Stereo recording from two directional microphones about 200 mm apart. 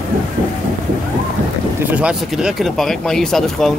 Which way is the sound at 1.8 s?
5° right (ahead or behind).